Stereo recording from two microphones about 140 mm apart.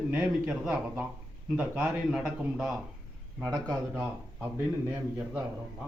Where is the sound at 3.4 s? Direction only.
25° right (ahead or behind).